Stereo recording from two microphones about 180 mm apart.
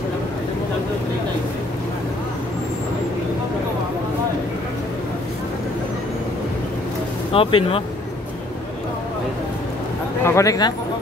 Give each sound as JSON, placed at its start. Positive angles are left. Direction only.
{"t": 7.3, "sound": "speech", "side_deg": 30}
{"t": 10.2, "sound": "speech", "side_deg": 15}